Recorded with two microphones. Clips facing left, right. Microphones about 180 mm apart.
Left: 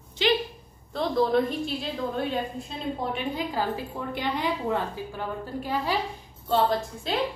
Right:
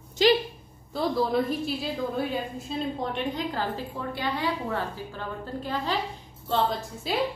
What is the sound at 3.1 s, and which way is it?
A woman's voice, 10° left (ahead or behind).